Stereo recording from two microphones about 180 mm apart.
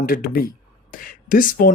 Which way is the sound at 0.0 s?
55° left (ahead or behind).